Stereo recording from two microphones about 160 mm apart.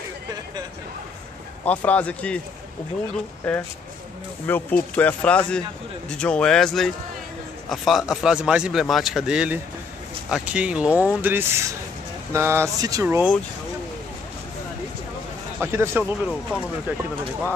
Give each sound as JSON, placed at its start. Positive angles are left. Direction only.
{"t": 1.6, "sound": "speech", "side_deg": 10}
{"t": 3.4, "sound": "speech", "side_deg": 5}
{"t": 15.6, "sound": "speech", "side_deg": -15}
{"t": 16.0, "sound": "speech", "side_deg": 0}